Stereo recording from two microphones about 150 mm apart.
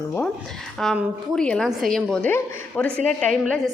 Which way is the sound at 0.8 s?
5° left (ahead or behind).